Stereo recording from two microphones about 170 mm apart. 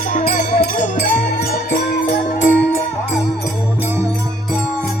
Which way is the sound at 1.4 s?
65° left (ahead or behind).